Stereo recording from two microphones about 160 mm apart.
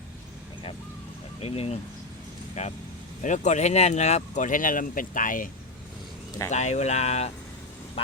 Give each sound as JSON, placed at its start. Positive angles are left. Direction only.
{"t": 1.4, "sound": "speech", "side_deg": 40}
{"t": 6.5, "sound": "speech", "side_deg": 45}